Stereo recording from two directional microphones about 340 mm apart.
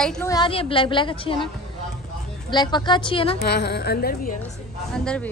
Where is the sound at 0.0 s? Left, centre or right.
Centre.